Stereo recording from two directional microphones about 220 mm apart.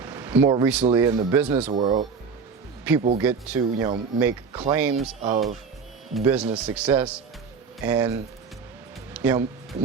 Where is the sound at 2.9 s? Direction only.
5° right (ahead or behind).